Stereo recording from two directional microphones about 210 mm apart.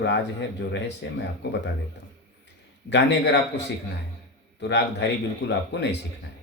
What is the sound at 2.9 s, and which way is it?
Speech, 55° left (ahead or behind).